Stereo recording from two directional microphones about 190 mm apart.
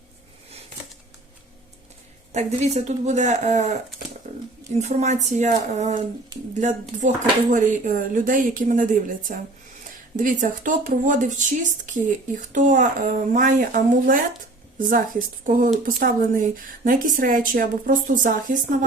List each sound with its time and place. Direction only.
2.3 s speech: 35° right (ahead or behind)
4.2 s a sound: 35° right (ahead or behind)
4.7 s speech: 35° right (ahead or behind)